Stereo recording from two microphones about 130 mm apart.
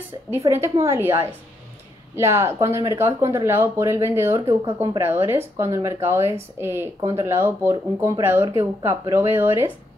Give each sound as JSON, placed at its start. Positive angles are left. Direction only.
{"t": 0.3, "sound": "speech", "side_deg": -20}